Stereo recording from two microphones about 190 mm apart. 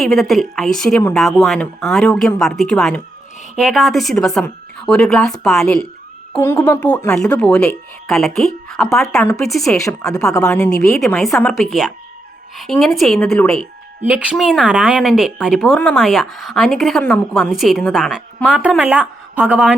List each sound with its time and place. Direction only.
0.0 s speech: centre (ahead or behind)
14.0 s a woman's voice: 10° right (ahead or behind)